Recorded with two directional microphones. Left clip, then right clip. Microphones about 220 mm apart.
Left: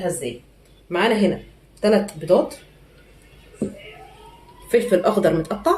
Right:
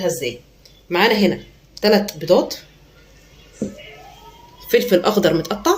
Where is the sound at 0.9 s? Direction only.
40° right (ahead or behind).